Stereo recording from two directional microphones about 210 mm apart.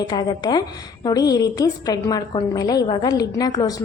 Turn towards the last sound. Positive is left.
turn(degrees=20)  # may be behind; listen again after turning